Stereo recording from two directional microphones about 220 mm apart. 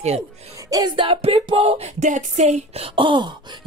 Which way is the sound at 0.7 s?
15° right (ahead or behind).